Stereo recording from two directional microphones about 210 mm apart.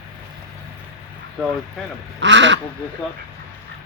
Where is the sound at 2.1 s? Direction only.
60° right (ahead or behind).